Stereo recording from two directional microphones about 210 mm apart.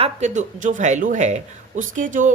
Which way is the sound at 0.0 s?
35° right (ahead or behind).